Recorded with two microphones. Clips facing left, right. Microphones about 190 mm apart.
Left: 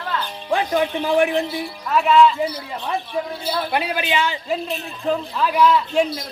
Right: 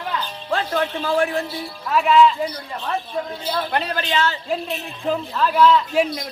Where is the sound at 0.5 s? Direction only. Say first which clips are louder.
Left 3 dB; 15° left (ahead or behind).